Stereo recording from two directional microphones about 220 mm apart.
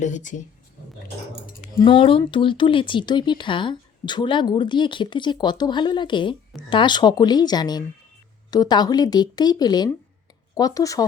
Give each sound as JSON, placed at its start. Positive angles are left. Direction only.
{"t": 0.0, "sound": "speech", "side_deg": 35}
{"t": 1.8, "sound": "speech", "side_deg": 25}